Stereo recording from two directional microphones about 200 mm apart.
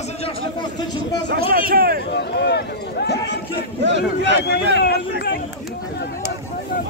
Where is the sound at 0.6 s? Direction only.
20° left (ahead or behind).